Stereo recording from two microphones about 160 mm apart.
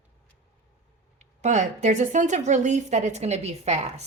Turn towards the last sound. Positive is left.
turn(degrees=-45)  # may be behind; listen again after turning